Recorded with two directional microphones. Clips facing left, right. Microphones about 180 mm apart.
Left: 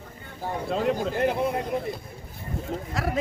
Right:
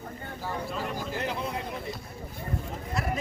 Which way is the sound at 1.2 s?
55° left (ahead or behind).